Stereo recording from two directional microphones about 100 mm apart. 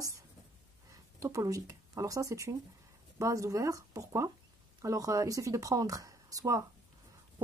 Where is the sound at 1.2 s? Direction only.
35° right (ahead or behind).